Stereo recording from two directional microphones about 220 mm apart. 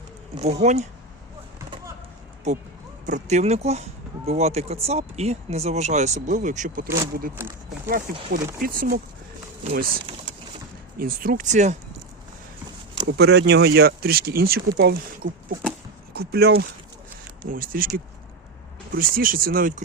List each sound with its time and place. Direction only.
0.3 s speech: 30° right (ahead or behind)
3.1 s speech: 35° right (ahead or behind)
13.1 s speech: 50° right (ahead or behind)